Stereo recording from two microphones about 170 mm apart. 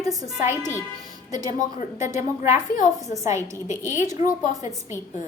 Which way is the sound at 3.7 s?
45° left (ahead or behind).